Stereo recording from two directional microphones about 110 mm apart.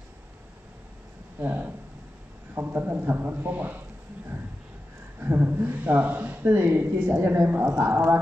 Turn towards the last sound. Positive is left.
turn(degrees=-25)  # may be behind; listen again after turning